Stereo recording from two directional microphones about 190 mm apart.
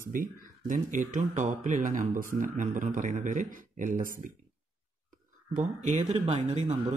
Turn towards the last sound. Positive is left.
turn(degrees=-35)  # may be behind; listen again after turning